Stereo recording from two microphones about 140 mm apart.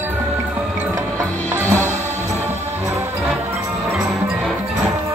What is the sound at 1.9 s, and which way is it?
Music, 55° right (ahead or behind).